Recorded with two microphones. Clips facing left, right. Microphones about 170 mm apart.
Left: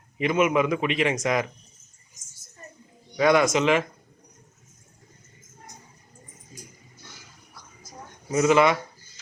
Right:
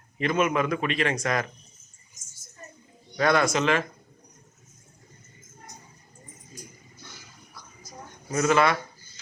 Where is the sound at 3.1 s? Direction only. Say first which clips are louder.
Left 3 dB; 15° left (ahead or behind).